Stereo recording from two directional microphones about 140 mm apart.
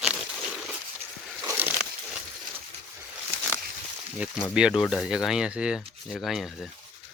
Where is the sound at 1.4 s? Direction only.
15° right (ahead or behind).